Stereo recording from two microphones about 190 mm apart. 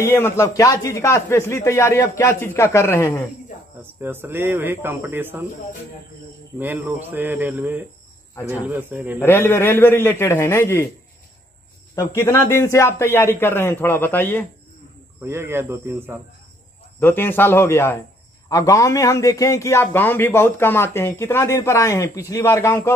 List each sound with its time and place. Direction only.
0.0 s a man's voice: 15° left (ahead or behind)
3.8 s speech: 10° right (ahead or behind)
6.6 s speech: 10° right (ahead or behind)
9.2 s a man's voice: 10° left (ahead or behind)
11.9 s a man's voice: 15° left (ahead or behind)
15.2 s speech: 10° right (ahead or behind)
17.0 s a man's voice: 10° left (ahead or behind)